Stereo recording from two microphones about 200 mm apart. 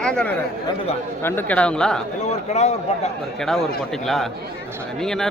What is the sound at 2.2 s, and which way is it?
Speech, 35° left (ahead or behind).